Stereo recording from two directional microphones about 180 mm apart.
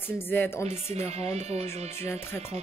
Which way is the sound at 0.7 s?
35° right (ahead or behind).